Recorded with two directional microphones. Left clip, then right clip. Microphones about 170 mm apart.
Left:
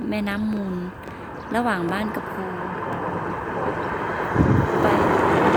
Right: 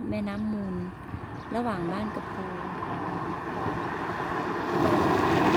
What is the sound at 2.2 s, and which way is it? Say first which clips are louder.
Vehicle: left 6 dB; 80° right.